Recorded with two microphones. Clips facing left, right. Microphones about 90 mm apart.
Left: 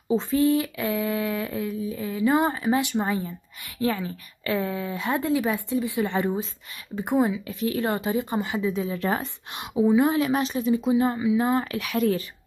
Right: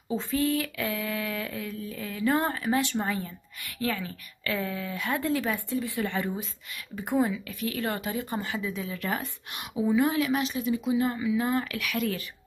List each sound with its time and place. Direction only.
0.1 s a woman's voice: 25° left (ahead or behind)
10.3 s speech: 35° left (ahead or behind)